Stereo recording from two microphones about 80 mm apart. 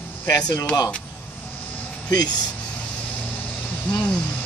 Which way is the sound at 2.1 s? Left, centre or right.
Left.